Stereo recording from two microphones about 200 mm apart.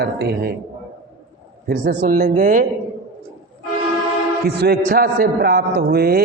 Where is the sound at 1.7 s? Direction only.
45° right (ahead or behind).